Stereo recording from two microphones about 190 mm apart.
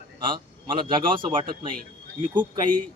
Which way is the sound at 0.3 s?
25° right (ahead or behind).